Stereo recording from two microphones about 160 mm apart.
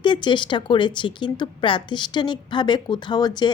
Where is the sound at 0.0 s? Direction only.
30° left (ahead or behind).